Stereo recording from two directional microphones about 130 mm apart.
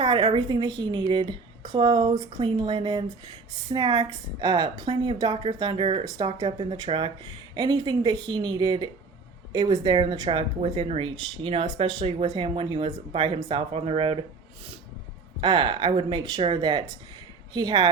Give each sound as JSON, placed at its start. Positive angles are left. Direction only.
{"t": 0.0, "sound": "speech", "side_deg": -35}
{"t": 6.3, "sound": "speech", "side_deg": -35}
{"t": 15.4, "sound": "speech", "side_deg": -35}